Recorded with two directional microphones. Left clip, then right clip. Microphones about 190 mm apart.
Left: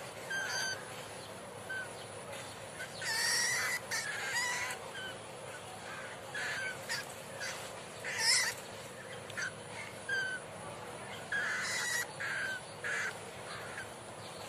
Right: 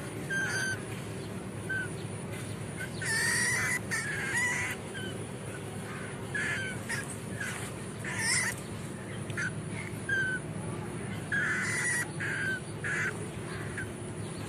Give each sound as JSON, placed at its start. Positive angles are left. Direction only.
{"t": 3.0, "sound": "fowl", "side_deg": 10}
{"t": 8.1, "sound": "cat", "side_deg": 15}
{"t": 11.3, "sound": "crow", "side_deg": 10}